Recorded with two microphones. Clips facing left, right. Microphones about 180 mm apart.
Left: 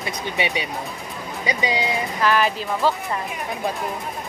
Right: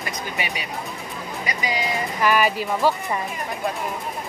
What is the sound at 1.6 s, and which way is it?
Speech, 25° left (ahead or behind).